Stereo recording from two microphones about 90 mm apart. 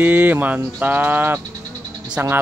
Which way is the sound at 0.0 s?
20° right (ahead or behind).